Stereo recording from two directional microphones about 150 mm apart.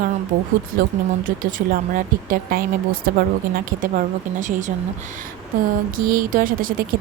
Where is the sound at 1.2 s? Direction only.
60° right (ahead or behind).